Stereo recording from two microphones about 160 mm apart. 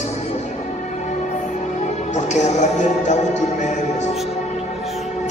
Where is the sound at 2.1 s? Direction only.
45° left (ahead or behind).